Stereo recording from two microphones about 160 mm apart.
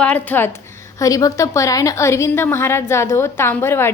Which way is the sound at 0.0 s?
10° left (ahead or behind).